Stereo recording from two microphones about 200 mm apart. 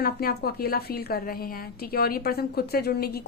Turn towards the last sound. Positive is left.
turn(degrees=50)  # may be behind; listen again after turning